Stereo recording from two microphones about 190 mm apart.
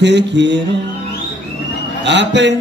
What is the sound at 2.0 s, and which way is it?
Speech, 70° right (ahead or behind).